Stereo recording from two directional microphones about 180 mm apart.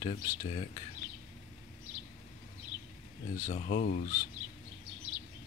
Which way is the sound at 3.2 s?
45° left (ahead or behind).